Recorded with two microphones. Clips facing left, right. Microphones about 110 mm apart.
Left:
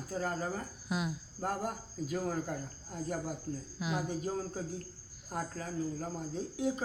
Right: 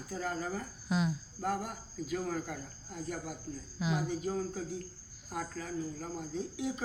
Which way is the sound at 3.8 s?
Centre (ahead or behind).